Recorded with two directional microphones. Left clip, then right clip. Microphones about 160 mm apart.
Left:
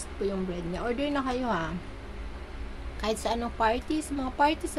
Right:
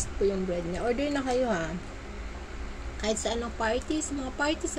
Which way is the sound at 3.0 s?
30° left (ahead or behind).